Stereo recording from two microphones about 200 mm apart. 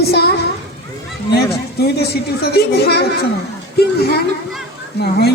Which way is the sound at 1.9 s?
50° left (ahead or behind).